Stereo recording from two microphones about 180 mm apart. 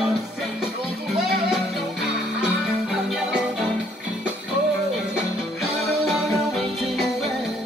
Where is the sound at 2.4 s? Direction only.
5° right (ahead or behind).